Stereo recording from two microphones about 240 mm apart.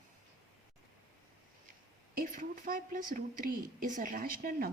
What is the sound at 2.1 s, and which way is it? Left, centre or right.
A woman's voice, right.